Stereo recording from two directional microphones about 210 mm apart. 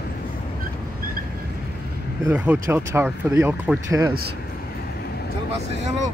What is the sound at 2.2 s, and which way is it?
Speech, 10° right (ahead or behind).